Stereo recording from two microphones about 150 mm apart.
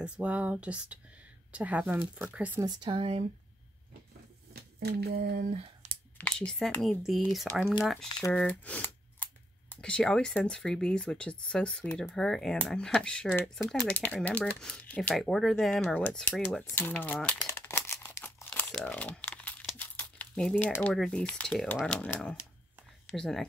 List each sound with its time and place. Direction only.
0.0 s speech: 10° right (ahead or behind)
2.6 s a woman's voice: 30° right (ahead or behind)
4.6 s speech: 90° right
6.1 s speech: 5° left (ahead or behind)
16.6 s crumpling: 15° left (ahead or behind)
23.1 s speech: 5° left (ahead or behind)